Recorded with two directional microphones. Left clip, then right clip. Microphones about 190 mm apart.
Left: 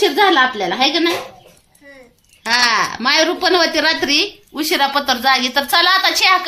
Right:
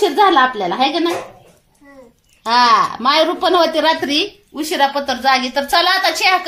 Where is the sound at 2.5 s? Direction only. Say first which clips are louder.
Right 3 dB; 20° left (ahead or behind).